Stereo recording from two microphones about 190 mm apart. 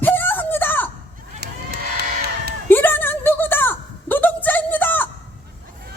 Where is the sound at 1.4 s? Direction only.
60° right (ahead or behind).